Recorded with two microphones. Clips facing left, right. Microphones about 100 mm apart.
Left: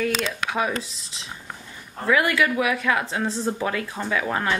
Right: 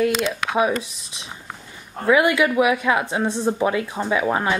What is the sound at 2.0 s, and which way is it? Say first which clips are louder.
Speech: right 4 dB; 20° right (ahead or behind).